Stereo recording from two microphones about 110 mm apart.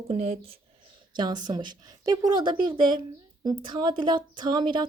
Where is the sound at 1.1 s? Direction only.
40° right (ahead or behind).